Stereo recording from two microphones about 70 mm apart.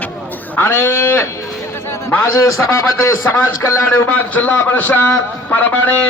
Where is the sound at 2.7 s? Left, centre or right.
Left.